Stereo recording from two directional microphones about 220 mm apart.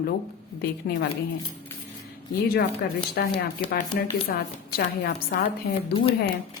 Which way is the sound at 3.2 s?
45° left (ahead or behind).